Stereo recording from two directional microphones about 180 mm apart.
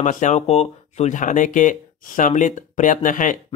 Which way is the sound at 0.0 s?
45° left (ahead or behind).